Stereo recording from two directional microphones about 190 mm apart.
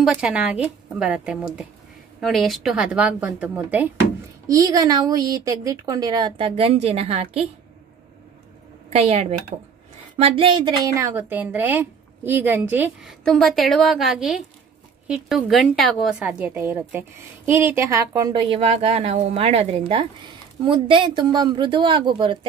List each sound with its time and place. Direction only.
0.0 s a woman's voice: 5° right (ahead or behind)
4.5 s speech: 20° right (ahead or behind)
8.9 s a woman's voice: 30° right (ahead or behind); by 13.1 s 10° right (ahead or behind)
13.2 s a woman's voice: centre (ahead or behind); by 22.5 s 25° right (ahead or behind)